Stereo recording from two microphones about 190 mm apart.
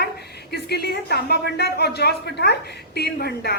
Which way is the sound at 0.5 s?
60° left (ahead or behind).